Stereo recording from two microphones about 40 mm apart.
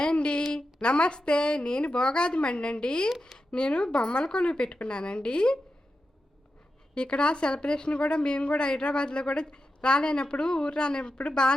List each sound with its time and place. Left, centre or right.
0.0 s a sound: left
0.5 s speech: left
6.9 s speech: left